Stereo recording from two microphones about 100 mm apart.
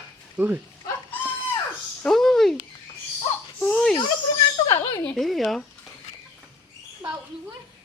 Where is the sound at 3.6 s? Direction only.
10° left (ahead or behind).